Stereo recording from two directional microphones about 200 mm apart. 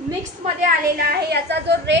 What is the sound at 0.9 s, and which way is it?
A woman's voice, 50° right (ahead or behind).